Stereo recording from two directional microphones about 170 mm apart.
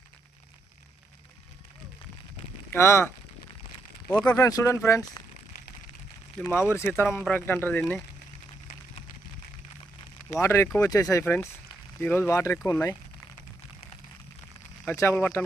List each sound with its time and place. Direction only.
2.7 s speech: 15° left (ahead or behind)
4.1 s speech: 5° left (ahead or behind)
4.4 s speech: 20° left (ahead or behind)
6.4 s speech: 10° left (ahead or behind)
10.4 s speech: 15° left (ahead or behind)
14.8 s speech: 15° left (ahead or behind)